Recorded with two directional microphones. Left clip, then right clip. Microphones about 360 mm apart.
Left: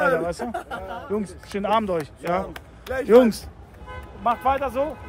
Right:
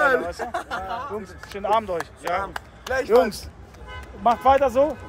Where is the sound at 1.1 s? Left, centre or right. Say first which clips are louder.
Left 4 dB; left.